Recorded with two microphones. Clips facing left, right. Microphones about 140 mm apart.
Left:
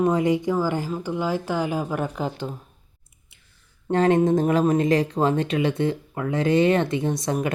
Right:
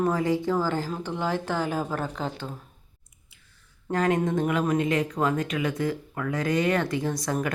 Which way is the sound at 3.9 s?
30° left (ahead or behind).